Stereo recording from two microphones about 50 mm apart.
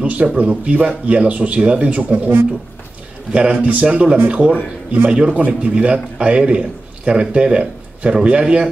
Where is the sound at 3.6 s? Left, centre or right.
Right.